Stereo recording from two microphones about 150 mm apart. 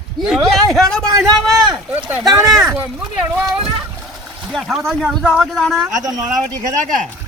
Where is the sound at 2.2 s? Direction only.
25° right (ahead or behind).